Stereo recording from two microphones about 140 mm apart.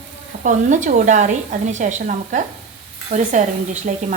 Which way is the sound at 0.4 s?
60° right (ahead or behind).